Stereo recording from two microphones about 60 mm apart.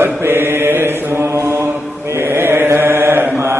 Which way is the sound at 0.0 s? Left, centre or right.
Right.